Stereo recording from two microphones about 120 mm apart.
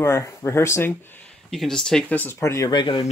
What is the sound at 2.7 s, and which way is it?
Speech, 40° left (ahead or behind).